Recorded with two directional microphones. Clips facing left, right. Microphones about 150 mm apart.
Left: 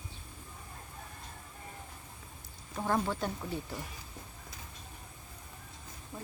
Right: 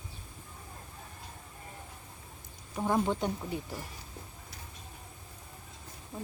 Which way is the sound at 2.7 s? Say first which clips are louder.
Right 3 dB; 15° right (ahead or behind).